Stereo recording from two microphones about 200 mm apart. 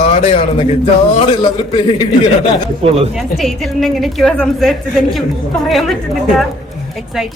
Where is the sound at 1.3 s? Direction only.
25° left (ahead or behind).